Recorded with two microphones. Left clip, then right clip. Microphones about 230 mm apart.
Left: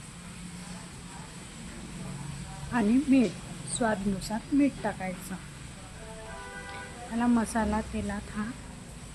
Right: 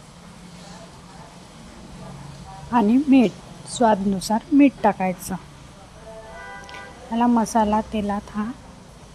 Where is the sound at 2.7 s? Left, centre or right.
Right.